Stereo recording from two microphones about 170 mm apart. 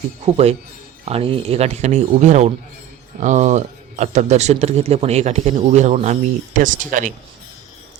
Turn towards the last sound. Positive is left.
turn(degrees=-50)  # may be behind; listen again after turning